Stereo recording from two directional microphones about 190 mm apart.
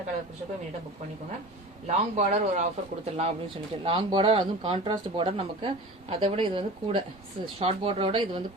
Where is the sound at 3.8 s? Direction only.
25° right (ahead or behind).